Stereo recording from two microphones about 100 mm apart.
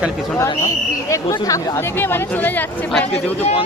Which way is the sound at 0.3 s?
30° left (ahead or behind).